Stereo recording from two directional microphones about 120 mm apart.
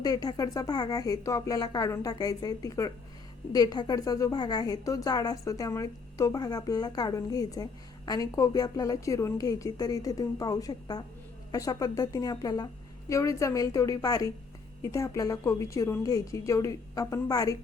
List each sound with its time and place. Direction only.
0.0 s a woman's voice: 30° left (ahead or behind)